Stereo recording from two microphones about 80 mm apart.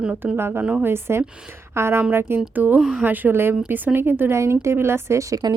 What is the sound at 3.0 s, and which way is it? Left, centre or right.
A woman's voice, right.